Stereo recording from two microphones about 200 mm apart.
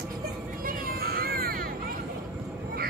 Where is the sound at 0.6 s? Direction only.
50° right (ahead or behind).